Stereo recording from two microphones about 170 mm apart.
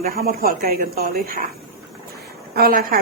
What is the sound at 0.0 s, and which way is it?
A woman's voice, 60° right (ahead or behind).